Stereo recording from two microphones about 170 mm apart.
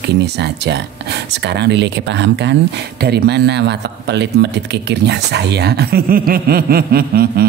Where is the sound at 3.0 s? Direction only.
70° right (ahead or behind).